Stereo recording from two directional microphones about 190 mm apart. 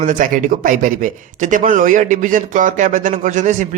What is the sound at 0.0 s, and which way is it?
Speech, 45° right (ahead or behind).